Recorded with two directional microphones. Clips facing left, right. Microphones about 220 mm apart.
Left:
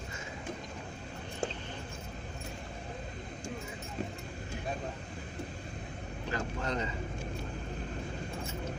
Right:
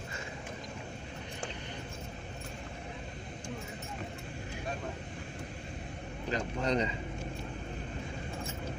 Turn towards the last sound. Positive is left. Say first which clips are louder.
# right 4 dB
turn(degrees=-20)  # may be behind; listen again after turning